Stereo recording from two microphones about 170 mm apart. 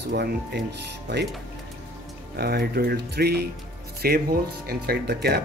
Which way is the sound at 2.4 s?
65° right (ahead or behind).